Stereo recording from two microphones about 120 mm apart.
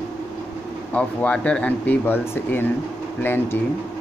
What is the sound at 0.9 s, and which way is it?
Speech, 10° left (ahead or behind).